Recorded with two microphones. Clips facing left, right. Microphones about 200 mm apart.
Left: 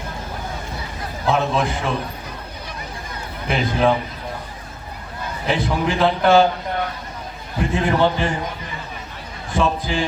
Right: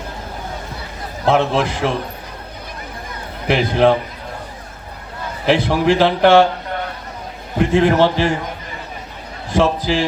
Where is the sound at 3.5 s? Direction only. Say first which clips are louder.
Right 5 dB; 70° right (ahead or behind).